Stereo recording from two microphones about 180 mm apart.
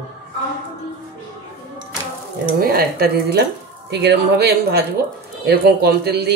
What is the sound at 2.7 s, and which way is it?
A man's voice, 60° right (ahead or behind).